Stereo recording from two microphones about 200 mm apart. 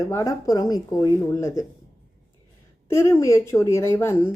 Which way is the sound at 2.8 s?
15° left (ahead or behind).